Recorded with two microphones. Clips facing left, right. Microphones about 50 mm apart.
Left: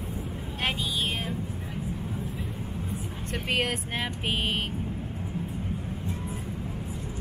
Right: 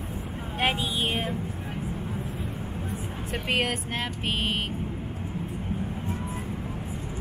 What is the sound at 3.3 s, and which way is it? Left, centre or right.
Speech, centre.